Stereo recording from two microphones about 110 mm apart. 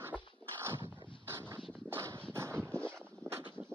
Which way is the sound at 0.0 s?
20° right (ahead or behind).